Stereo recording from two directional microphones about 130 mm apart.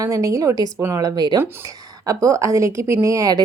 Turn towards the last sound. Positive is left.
turn(degrees=-25)  # may be behind; listen again after turning